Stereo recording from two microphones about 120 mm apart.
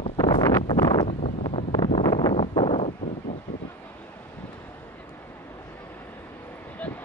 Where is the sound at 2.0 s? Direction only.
35° left (ahead or behind).